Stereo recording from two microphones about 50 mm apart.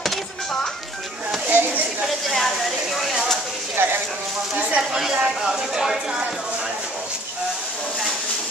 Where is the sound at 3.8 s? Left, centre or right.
Right.